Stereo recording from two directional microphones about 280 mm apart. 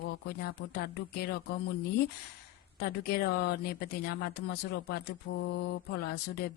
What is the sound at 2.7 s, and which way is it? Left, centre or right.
Speech, left.